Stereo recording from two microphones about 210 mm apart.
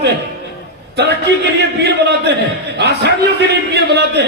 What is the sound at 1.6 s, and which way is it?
A man's voice, 55° right (ahead or behind).